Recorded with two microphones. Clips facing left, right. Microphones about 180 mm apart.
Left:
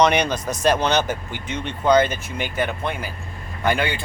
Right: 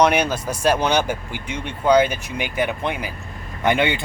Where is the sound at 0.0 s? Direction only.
5° right (ahead or behind).